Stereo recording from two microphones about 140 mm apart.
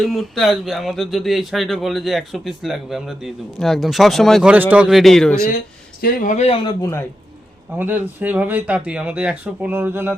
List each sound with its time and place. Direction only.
0.0 s speech: centre (ahead or behind)
4.5 s speech: 10° right (ahead or behind); by 5.5 s 5° left (ahead or behind)
6.0 s speech: 90° left
6.3 s a man's voice: 50° left (ahead or behind)
7.8 s speech: 15° right (ahead or behind)